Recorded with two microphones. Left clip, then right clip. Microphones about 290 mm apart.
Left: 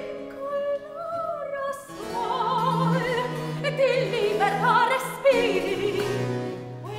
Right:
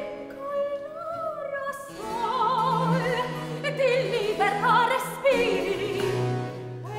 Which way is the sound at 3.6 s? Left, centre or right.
Right.